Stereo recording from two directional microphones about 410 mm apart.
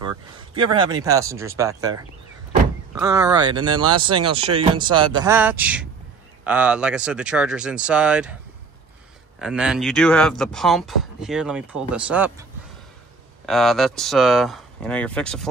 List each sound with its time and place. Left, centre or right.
0.0 s speech: centre
9.4 s speech: centre
13.5 s speech: centre